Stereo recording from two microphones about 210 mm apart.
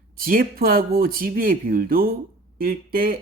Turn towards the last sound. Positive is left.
turn(degrees=-45)  # may be behind; listen again after turning